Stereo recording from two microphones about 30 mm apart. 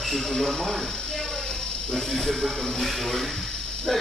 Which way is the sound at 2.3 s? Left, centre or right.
Centre.